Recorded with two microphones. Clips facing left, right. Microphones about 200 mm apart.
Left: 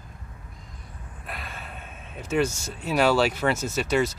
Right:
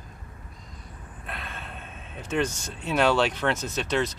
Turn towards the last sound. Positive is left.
turn(degrees=5)  # may be behind; listen again after turning